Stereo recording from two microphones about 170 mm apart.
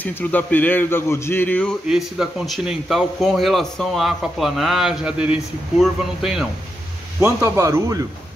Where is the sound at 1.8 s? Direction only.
5° right (ahead or behind).